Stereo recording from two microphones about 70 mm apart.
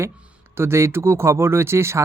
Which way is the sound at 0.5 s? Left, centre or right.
Right.